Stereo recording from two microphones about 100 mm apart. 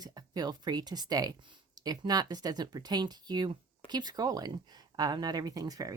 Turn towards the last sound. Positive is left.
turn(degrees=-35)  # may be behind; listen again after turning